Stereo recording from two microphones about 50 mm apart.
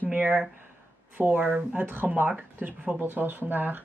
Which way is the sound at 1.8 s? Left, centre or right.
Right.